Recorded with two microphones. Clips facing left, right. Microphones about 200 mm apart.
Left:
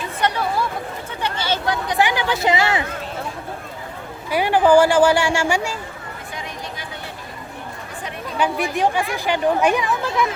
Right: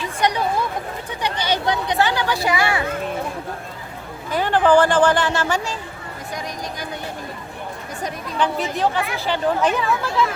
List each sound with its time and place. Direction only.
0.2 s a sound: 15° right (ahead or behind)
1.2 s speech: 15° right (ahead or behind)
2.0 s a woman's voice: 15° left (ahead or behind)
4.3 s speech: 10° left (ahead or behind)
8.4 s speech: 10° left (ahead or behind)